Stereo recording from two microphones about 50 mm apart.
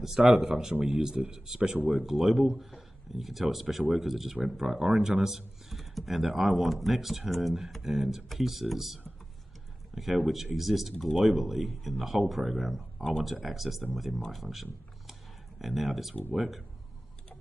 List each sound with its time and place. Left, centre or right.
0.2 s speech: right
0.8 s speech: centre